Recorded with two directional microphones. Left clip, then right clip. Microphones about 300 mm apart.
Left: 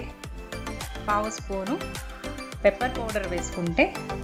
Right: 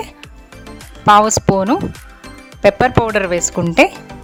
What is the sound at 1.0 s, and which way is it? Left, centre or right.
Speech, right.